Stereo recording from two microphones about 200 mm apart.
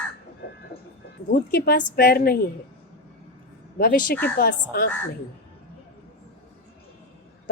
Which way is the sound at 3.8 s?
45° left (ahead or behind).